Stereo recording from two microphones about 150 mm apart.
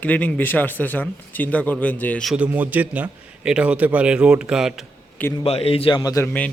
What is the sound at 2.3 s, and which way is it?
A man's voice, 10° right (ahead or behind).